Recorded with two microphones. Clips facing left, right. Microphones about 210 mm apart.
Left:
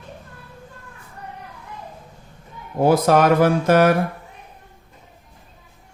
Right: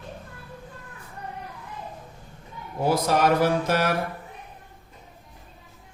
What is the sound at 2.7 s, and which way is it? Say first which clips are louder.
Speech: left 7 dB; 55° left (ahead or behind).